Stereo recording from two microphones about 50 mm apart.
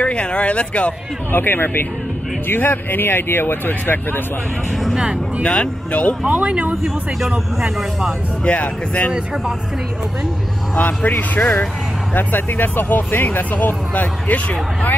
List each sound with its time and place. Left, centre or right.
0.0 s speech: left
1.3 s speech: left
5.4 s speech: left
6.2 s speech: right
6.7 s speech: centre
7.2 s speech: centre
8.5 s speech: left
10.8 s speech: left